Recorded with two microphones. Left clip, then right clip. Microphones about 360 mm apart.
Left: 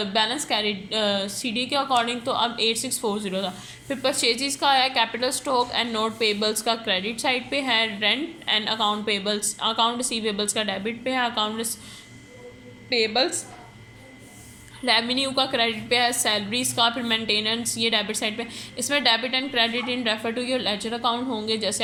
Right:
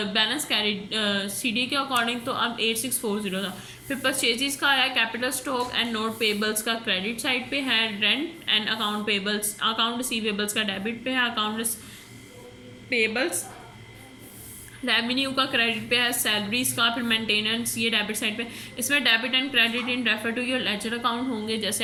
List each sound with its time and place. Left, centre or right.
0.0 s a woman's voice: centre
12.9 s a woman's voice: centre
14.8 s a woman's voice: centre